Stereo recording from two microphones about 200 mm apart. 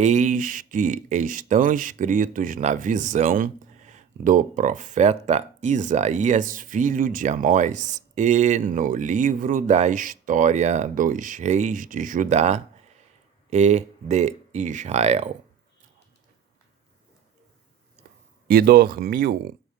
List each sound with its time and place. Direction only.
0.0 s speech: 35° right (ahead or behind)
18.0 s a sound: 50° right (ahead or behind)
18.4 s speech: 50° right (ahead or behind)